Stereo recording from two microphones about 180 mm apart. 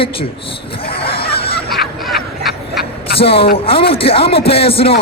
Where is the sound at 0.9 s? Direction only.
30° left (ahead or behind).